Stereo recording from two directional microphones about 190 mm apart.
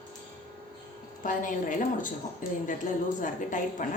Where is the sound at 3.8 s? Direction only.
45° left (ahead or behind).